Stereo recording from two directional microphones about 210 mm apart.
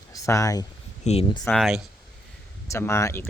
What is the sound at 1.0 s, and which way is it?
Speech, 30° left (ahead or behind).